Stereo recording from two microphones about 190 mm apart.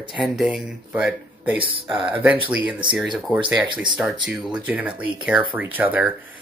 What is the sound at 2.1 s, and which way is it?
Speech, 10° right (ahead or behind).